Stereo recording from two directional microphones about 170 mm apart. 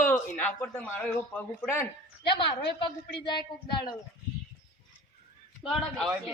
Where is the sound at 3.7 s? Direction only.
25° left (ahead or behind).